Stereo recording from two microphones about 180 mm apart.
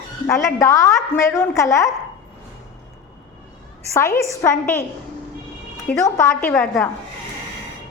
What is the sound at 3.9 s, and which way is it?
Speech, 15° left (ahead or behind).